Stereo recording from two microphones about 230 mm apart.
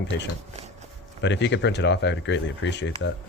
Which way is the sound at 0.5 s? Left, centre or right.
Right.